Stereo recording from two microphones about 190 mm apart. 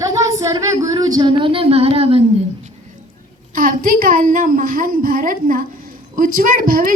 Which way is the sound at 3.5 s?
45° right (ahead or behind).